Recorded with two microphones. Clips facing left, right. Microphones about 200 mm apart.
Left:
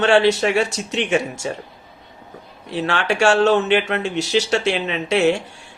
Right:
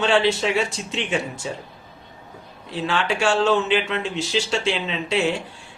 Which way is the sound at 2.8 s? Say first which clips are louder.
Left 4 dB; 75° left (ahead or behind).